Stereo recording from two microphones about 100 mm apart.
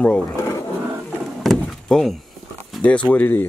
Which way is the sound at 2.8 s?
15° left (ahead or behind).